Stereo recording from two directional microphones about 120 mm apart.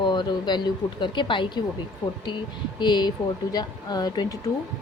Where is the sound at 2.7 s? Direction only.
40° left (ahead or behind).